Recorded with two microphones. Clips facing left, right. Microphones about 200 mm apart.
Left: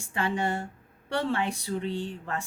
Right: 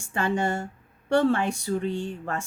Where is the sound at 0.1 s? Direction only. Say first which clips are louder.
Right 3 dB; 50° right (ahead or behind).